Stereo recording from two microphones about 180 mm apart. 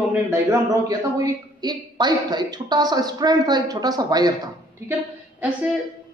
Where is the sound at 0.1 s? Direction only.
15° right (ahead or behind).